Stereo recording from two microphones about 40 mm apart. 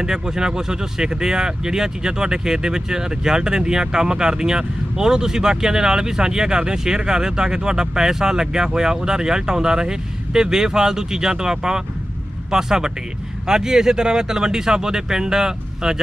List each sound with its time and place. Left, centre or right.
0.0 s speech: centre